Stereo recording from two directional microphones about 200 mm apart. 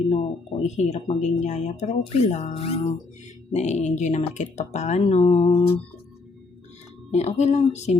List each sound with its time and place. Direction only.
0.1 s speech: 30° left (ahead or behind)
7.1 s speech: 35° left (ahead or behind)